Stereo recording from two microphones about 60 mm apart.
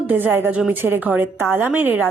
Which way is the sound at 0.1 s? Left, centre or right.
Right.